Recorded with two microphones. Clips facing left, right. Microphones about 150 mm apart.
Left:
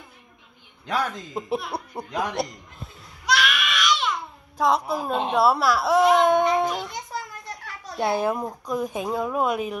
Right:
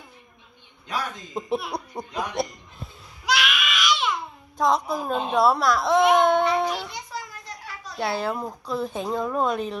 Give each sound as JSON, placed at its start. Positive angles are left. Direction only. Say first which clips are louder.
{"t": 1.3, "sound": "speech", "louder": "even", "side_deg": 5}
{"t": 3.3, "sound": "baby cry", "louder": "left 1 dB", "side_deg": -5}
{"t": 6.2, "sound": "child singing", "louder": "left 1 dB", "side_deg": 15}
{"t": 6.9, "sound": "children playing", "louder": "left 2 dB", "side_deg": 50}
{"t": 8.0, "sound": "a woman's voice", "louder": "left 3 dB", "side_deg": 20}